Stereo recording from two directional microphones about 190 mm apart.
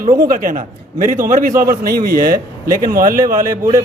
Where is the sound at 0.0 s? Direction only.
45° right (ahead or behind).